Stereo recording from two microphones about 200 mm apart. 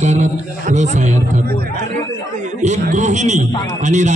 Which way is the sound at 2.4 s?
35° right (ahead or behind).